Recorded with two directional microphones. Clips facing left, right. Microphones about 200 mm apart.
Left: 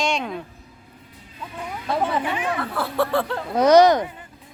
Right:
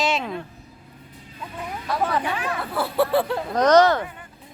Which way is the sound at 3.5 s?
10° left (ahead or behind).